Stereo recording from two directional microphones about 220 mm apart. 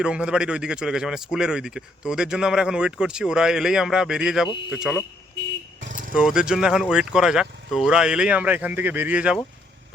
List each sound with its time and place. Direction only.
0.0 s speech: 5° right (ahead or behind)
5.8 s vehicle: 35° right (ahead or behind)
6.1 s speech: 5° right (ahead or behind)